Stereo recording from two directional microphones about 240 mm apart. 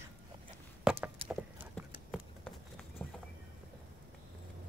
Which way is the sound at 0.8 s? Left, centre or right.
Centre.